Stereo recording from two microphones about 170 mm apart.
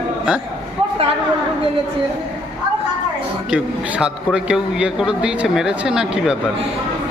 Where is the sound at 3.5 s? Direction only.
5° right (ahead or behind).